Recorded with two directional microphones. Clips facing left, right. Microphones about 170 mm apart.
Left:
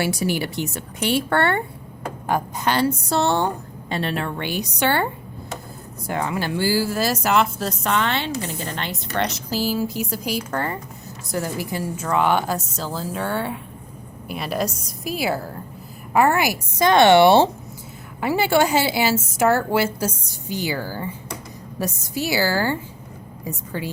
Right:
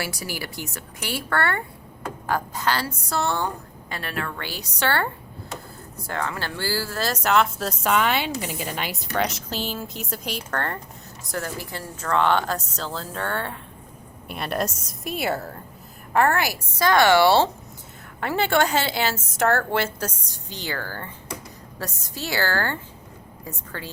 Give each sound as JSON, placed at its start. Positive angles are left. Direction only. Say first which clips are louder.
{"t": 0.0, "sound": "a woman's voice", "louder": "left 9 dB", "side_deg": 25}
{"t": 6.1, "sound": "a woman's voice", "louder": "left 5 dB", "side_deg": 15}
{"t": 16.1, "sound": "a woman's voice", "louder": "left 3 dB", "side_deg": 10}
{"t": 18.2, "sound": "a woman's voice", "louder": "left 3 dB", "side_deg": 10}